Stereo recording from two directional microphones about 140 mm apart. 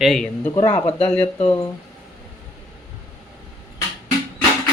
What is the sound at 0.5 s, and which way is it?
Speech, 35° left (ahead or behind).